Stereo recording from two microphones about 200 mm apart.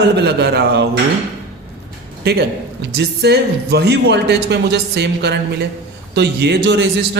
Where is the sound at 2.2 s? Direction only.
55° right (ahead or behind).